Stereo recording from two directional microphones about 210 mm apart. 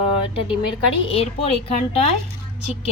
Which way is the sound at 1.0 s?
25° left (ahead or behind).